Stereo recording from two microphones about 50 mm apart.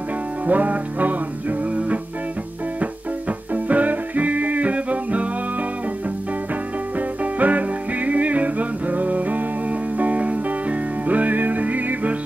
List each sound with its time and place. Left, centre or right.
0.5 s music: right
3.5 s music: right
7.3 s music: right